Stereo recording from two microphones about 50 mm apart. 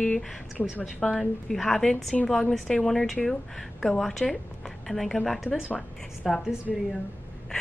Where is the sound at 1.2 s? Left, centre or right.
Centre.